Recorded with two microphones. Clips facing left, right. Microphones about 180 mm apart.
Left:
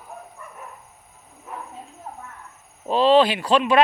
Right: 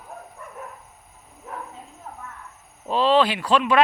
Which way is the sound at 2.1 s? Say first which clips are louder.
Left 2 dB; 30° left (ahead or behind).